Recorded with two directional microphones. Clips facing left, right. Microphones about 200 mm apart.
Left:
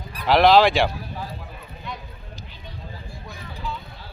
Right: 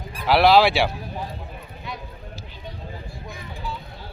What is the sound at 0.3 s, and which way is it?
Speech, 10° right (ahead or behind).